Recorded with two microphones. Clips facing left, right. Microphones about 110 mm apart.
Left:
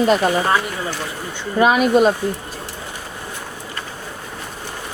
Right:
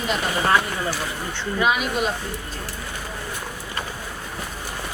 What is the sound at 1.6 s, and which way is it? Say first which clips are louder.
Speech: left 9 dB; 45° left (ahead or behind).